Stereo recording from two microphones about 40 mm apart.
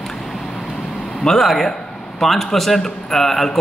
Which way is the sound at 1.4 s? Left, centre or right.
Centre.